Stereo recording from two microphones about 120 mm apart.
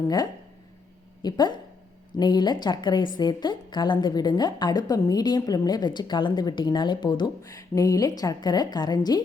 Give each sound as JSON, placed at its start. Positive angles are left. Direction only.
{"t": 1.2, "sound": "a woman's voice", "side_deg": 35}